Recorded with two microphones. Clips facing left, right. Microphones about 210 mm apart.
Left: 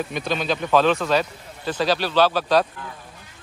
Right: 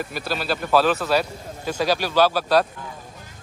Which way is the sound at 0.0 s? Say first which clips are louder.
Left 2 dB; 5° right (ahead or behind).